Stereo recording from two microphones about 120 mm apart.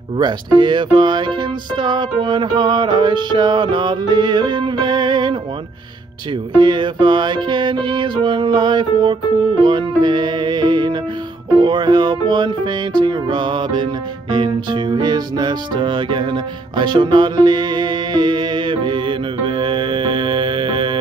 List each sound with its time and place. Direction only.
0.2 s music: 40° right (ahead or behind)
6.6 s music: 40° right (ahead or behind)